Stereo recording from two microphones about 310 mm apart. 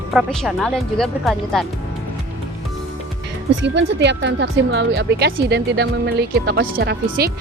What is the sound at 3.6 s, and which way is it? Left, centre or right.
Speech, right.